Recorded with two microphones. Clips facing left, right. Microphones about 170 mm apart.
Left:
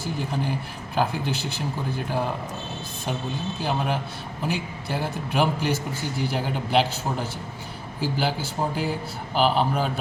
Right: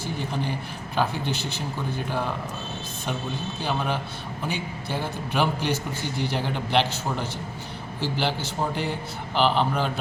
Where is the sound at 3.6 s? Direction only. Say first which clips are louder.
Left 1 dB; 5° left (ahead or behind).